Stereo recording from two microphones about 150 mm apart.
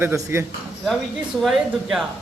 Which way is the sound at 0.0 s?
15° right (ahead or behind).